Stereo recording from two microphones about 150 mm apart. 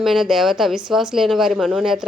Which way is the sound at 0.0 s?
Centre (ahead or behind).